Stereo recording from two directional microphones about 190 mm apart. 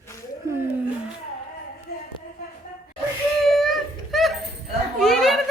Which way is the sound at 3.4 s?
Centre (ahead or behind).